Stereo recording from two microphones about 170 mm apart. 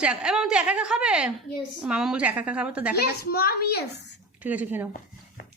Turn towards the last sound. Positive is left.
turn(degrees=-10)  # may be behind; listen again after turning